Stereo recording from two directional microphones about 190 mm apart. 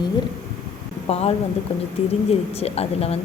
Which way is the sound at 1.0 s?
30° left (ahead or behind).